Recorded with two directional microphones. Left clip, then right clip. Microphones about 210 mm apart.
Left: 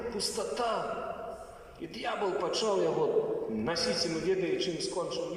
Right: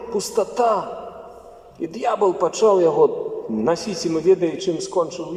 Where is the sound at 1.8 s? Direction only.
50° right (ahead or behind).